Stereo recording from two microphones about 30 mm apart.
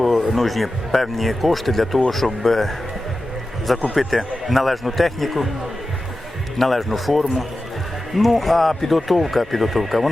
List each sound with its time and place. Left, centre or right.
0.0 s speech: centre
6.6 s speech: centre